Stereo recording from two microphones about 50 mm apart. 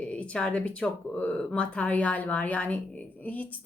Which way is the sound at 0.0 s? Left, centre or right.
Left.